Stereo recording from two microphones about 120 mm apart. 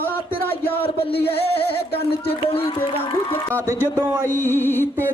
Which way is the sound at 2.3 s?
55° left (ahead or behind).